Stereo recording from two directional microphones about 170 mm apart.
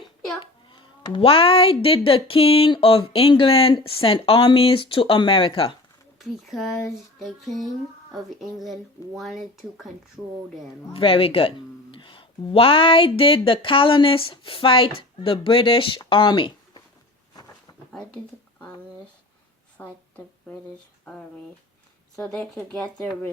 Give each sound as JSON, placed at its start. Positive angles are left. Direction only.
{"t": 0.7, "sound": "speech", "side_deg": 30}
{"t": 6.1, "sound": "speech", "side_deg": 0}
{"t": 10.9, "sound": "speech", "side_deg": 30}
{"t": 19.7, "sound": "a sound", "side_deg": 10}
{"t": 21.0, "sound": "speech", "side_deg": 5}